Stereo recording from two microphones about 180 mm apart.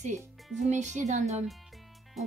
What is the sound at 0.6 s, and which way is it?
Speech, 40° right (ahead or behind).